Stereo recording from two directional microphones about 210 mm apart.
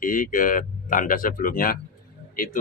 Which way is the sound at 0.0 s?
40° left (ahead or behind).